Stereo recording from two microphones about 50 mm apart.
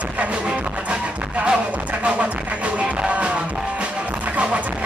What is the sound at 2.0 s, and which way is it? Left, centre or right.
Music, right.